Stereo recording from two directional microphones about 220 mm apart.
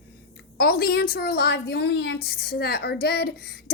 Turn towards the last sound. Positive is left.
turn(degrees=45)  # may be behind; listen again after turning